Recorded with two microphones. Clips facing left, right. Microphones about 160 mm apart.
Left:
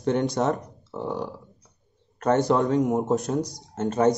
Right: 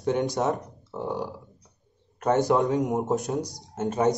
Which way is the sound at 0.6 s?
15° right (ahead or behind).